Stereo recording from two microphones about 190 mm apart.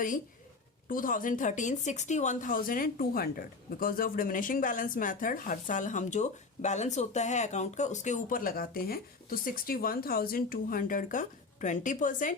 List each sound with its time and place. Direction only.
0.9 s speech: 45° left (ahead or behind)